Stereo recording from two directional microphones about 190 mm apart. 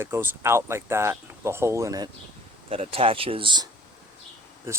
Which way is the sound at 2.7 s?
30° right (ahead or behind).